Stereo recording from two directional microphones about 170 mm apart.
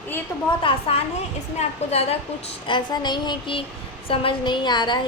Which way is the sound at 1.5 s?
35° left (ahead or behind).